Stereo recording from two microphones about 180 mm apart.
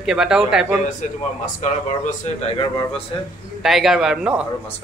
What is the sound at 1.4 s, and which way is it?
Speech, 45° left (ahead or behind).